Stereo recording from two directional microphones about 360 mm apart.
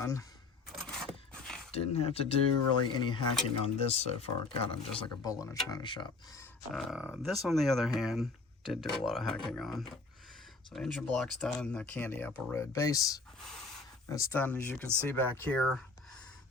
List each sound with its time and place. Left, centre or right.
0.0 s speech: centre
0.8 s a sound: centre
1.7 s speech: centre
6.7 s speech: centre